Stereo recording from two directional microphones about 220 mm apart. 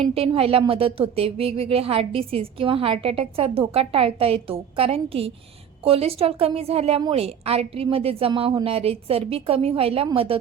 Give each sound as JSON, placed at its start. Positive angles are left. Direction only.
{"t": 0.0, "sound": "speech", "side_deg": -25}